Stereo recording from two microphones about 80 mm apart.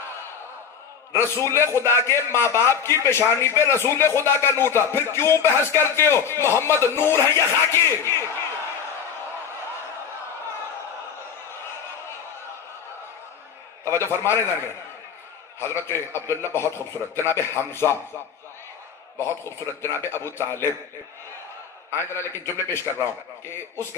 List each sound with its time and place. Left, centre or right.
1.1 s a man's voice: left
13.8 s a man's voice: left
15.6 s a man's voice: left
19.1 s a man's voice: left
21.9 s a man's voice: left